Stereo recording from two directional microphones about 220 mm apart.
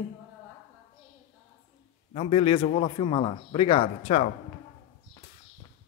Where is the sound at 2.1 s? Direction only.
25° left (ahead or behind).